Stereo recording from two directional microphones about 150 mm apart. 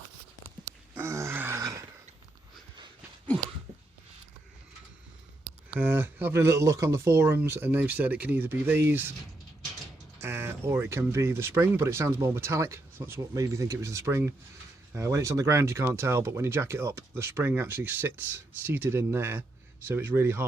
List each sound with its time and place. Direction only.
0.6 s groan: 20° right (ahead or behind)
5.4 s speech: 10° right (ahead or behind)
10.2 s speech: 15° right (ahead or behind)